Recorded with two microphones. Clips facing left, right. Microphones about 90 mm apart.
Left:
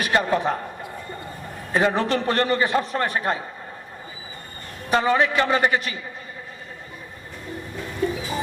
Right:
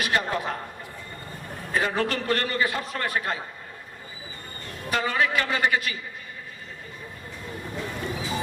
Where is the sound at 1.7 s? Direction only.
30° left (ahead or behind).